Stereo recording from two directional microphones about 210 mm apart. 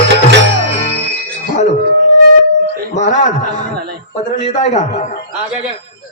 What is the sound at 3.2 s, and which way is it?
A man's voice, 35° left (ahead or behind).